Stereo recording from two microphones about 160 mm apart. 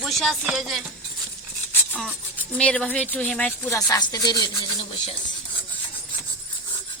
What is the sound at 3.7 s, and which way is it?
Speech, 20° left (ahead or behind).